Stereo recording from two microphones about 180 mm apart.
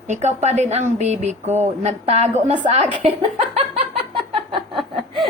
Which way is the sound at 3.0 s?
35° right (ahead or behind).